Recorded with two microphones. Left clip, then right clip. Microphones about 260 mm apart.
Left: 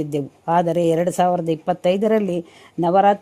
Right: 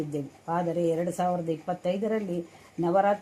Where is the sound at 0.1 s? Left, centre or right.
Left.